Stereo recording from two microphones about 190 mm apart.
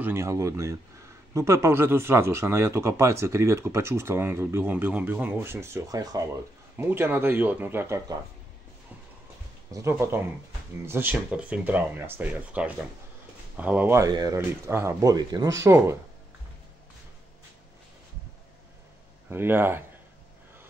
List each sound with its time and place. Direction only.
0.0 s speech: 15° right (ahead or behind)
9.7 s speech: 15° right (ahead or behind)
19.3 s speech: 10° right (ahead or behind)